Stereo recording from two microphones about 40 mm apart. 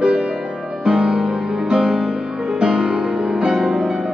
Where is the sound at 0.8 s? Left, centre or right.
Centre.